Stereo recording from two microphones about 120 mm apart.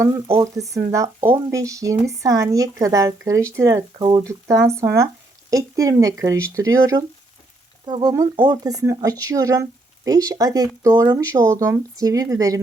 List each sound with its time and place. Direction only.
0.5 s speech: 25° right (ahead or behind)
7.9 s speech: 40° right (ahead or behind)